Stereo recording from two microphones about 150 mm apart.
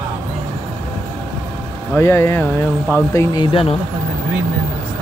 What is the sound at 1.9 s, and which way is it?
Speech, 15° left (ahead or behind).